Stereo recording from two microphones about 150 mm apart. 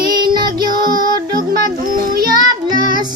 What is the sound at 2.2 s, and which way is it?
Child singing, 25° right (ahead or behind).